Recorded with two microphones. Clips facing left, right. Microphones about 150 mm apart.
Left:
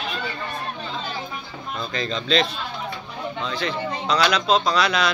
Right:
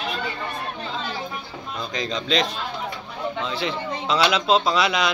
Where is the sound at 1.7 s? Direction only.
15° right (ahead or behind).